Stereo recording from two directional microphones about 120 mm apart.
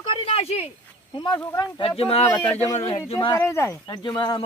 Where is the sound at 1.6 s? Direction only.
45° left (ahead or behind).